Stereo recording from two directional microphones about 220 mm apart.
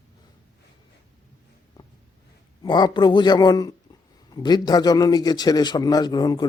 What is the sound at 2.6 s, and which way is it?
A man's voice, 20° left (ahead or behind).